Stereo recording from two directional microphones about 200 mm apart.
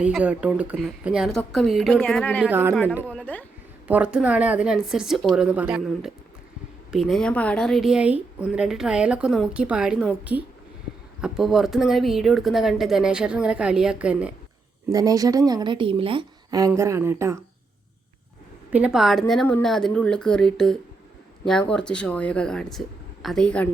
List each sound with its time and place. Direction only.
0.0 s a woman's voice: 5° right (ahead or behind)
2.4 s a woman's voice: 10° right (ahead or behind)
3.1 s speech: 5° left (ahead or behind)
3.8 s a woman's voice: 5° right (ahead or behind)
11.2 s a woman's voice: centre (ahead or behind)
14.8 s a woman's voice: 15° right (ahead or behind)
18.7 s a woman's voice: 5° right (ahead or behind)